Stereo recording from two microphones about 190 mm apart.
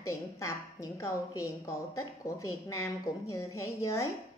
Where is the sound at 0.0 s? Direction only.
15° left (ahead or behind).